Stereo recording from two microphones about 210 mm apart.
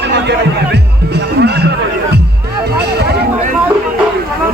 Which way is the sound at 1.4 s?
50° right (ahead or behind).